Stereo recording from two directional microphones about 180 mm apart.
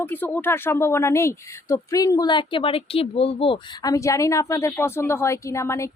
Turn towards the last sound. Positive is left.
turn(degrees=15)  # may be behind; listen again after turning